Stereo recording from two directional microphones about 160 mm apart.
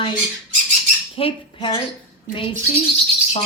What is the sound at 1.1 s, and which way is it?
Speech, 35° left (ahead or behind).